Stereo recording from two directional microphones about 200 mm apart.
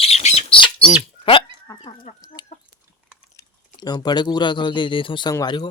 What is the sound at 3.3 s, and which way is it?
Speech, 20° left (ahead or behind).